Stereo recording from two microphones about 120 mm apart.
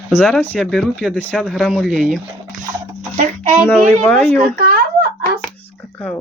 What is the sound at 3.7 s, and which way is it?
Speech, 10° left (ahead or behind).